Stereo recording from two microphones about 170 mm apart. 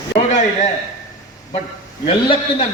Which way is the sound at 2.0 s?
35° left (ahead or behind).